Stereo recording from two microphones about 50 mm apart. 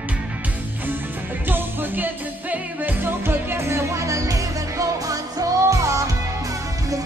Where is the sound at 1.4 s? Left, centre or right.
Right.